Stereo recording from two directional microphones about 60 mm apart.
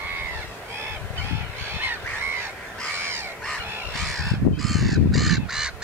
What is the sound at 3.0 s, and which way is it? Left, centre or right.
Crow, right.